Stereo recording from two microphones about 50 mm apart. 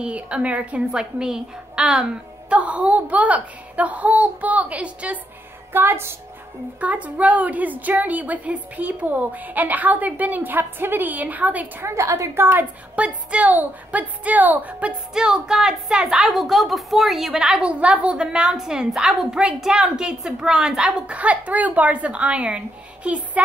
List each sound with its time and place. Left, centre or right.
0.0 s a woman's voice: right
5.7 s a woman's voice: right
6.8 s a woman's voice: right
11.8 s a woman's voice: right
12.4 s a woman's voice: right
12.9 s a woman's voice: right
15.1 s a woman's voice: centre
21.2 s a woman's voice: right